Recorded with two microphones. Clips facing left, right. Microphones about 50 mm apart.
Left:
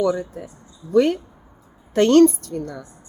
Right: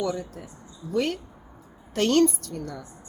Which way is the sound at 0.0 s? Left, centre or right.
Centre.